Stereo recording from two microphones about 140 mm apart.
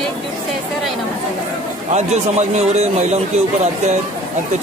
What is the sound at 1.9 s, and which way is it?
A man's voice, 55° right (ahead or behind).